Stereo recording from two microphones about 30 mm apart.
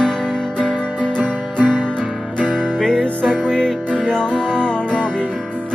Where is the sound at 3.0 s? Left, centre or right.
Left.